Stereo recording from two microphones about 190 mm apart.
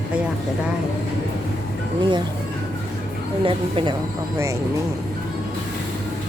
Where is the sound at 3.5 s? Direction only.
25° right (ahead or behind).